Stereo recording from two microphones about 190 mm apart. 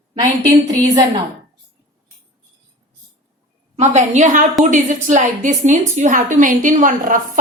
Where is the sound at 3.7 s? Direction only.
40° right (ahead or behind).